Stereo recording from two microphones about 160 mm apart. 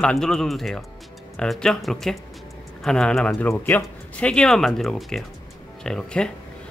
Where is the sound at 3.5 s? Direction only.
15° left (ahead or behind).